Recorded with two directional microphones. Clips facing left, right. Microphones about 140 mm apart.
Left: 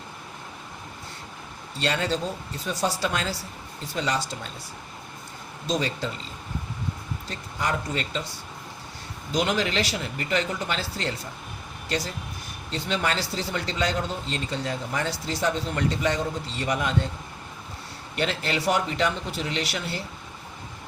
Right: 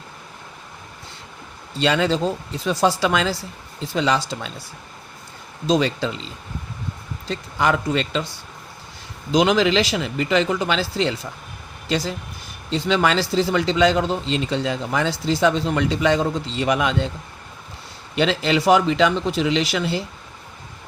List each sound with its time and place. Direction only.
1.8 s a man's voice: 90° right
5.6 s a man's voice: 90° right
7.3 s a man's voice: 90° right
9.3 s a man's voice: 90° right
18.1 s a man's voice: 90° right